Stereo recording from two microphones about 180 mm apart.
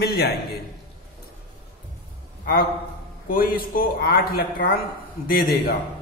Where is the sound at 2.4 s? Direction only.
60° left (ahead or behind).